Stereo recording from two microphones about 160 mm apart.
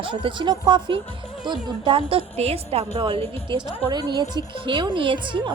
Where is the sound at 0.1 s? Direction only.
30° right (ahead or behind).